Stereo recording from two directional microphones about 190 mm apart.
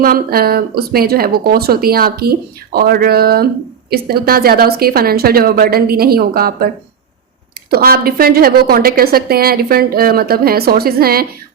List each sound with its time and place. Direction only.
0.0 s a woman's voice: 50° right (ahead or behind)
7.7 s a woman's voice: 55° right (ahead or behind)